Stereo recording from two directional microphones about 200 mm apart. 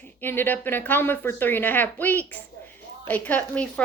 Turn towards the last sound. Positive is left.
turn(degrees=5)  # may be behind; listen again after turning